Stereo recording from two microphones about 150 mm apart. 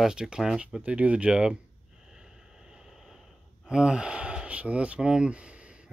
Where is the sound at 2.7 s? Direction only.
5° right (ahead or behind).